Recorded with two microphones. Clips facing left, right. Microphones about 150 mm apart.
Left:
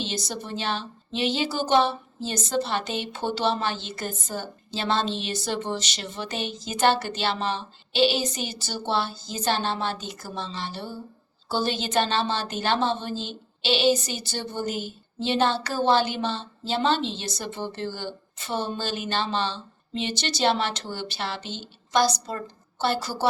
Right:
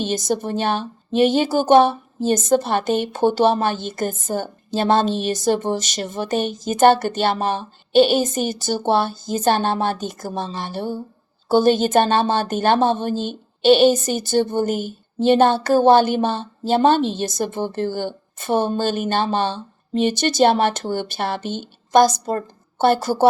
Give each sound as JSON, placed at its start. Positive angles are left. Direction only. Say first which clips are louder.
{"t": 0.0, "sound": "a woman's voice", "louder": "right 10 dB", "side_deg": -45}